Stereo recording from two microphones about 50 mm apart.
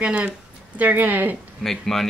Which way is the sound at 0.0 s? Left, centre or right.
Right.